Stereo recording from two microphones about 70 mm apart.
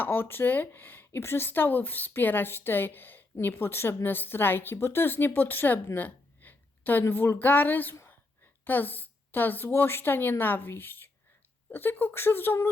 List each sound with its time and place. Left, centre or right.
0.0 s a woman's voice: left